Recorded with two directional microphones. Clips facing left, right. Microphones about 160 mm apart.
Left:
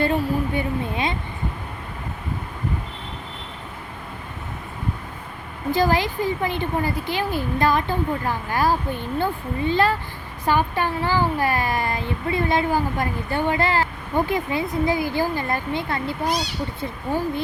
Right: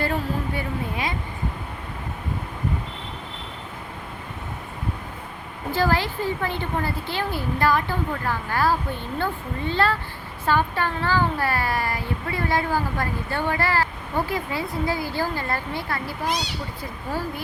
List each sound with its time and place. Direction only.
0.0 s speech: 20° left (ahead or behind)
5.7 s speech: 15° left (ahead or behind)